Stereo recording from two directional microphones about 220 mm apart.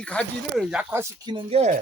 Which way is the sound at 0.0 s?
5° left (ahead or behind).